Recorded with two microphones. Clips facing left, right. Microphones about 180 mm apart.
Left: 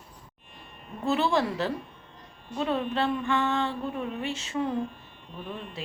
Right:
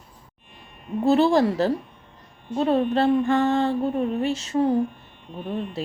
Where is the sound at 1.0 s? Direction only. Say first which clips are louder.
Right 8 dB; 35° right (ahead or behind).